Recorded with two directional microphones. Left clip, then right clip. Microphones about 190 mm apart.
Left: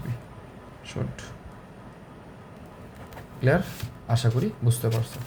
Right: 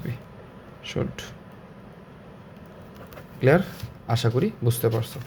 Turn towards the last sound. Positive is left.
turn(degrees=-35)  # may be behind; listen again after turning